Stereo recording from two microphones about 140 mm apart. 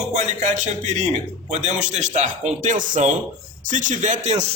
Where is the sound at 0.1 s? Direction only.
60° right (ahead or behind).